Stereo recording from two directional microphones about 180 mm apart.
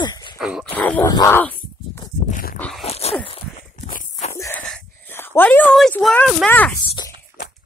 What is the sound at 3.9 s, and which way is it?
Walk, 45° left (ahead or behind).